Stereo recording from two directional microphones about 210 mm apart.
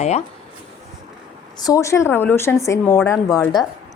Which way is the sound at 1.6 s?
15° left (ahead or behind).